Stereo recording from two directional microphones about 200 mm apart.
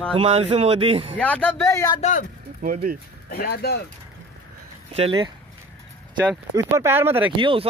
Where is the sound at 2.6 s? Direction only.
50° right (ahead or behind).